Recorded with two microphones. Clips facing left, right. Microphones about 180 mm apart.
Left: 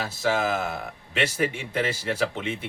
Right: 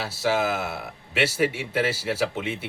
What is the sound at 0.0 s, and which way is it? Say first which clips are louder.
A man's voice: right 1 dB; 5° right (ahead or behind).